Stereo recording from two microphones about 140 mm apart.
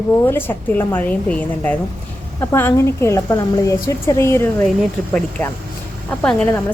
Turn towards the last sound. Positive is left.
turn(degrees=10)  # may be behind; listen again after turning